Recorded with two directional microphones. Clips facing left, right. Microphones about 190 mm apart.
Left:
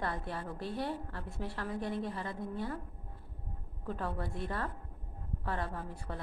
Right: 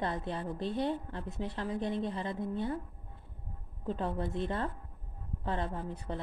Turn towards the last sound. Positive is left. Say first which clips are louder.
# right 4 dB
turn(degrees=-20)  # may be behind; listen again after turning